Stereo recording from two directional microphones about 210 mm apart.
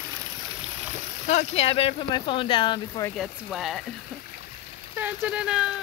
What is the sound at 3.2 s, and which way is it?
Speech, centre (ahead or behind).